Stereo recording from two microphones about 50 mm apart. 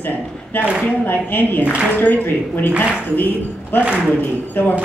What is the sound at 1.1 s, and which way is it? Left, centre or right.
A woman's voice, left.